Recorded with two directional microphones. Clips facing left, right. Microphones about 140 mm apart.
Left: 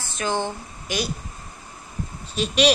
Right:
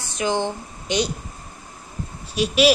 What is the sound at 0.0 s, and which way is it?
A woman's voice, 15° right (ahead or behind).